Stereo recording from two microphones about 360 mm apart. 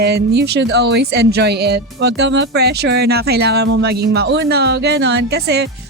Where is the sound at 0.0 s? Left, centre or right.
Right.